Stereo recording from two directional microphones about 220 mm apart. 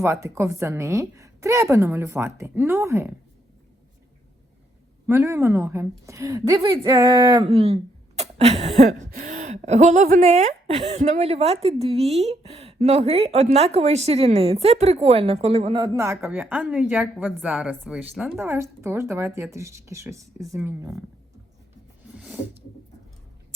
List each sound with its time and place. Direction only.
0.0 s a woman's voice: 15° right (ahead or behind)
5.0 s a woman's voice: 10° right (ahead or behind)
16.2 s a woman's voice: 10° right (ahead or behind)
22.1 s a sound: 5° right (ahead or behind)